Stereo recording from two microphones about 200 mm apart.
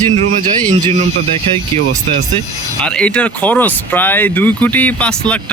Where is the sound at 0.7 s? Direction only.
35° right (ahead or behind).